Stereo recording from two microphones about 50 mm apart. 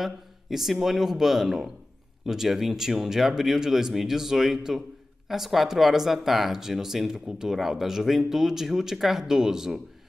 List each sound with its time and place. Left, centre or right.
0.0 s speech: centre